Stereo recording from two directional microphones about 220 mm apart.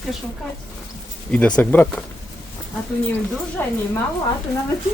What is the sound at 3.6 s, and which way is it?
Speech, 10° left (ahead or behind).